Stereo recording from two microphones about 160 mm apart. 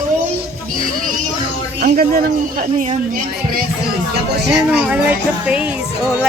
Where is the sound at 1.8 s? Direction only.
65° right (ahead or behind).